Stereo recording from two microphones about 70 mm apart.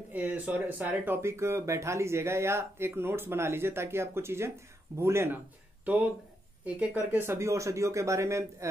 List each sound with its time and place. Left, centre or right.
0.1 s speech: right
6.6 s a woman's voice: right
7.2 s speech: right